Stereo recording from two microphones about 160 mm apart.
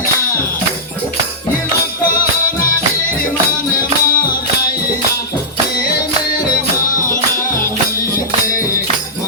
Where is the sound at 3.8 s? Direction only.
60° left (ahead or behind).